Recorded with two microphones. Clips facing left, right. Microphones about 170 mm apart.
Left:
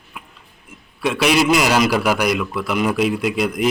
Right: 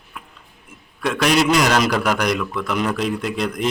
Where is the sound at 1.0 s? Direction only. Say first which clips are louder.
Left 1 dB; 5° left (ahead or behind).